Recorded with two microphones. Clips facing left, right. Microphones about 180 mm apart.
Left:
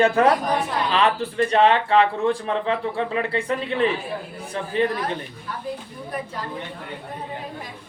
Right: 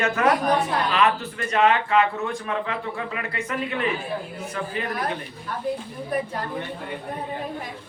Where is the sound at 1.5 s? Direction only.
30° left (ahead or behind).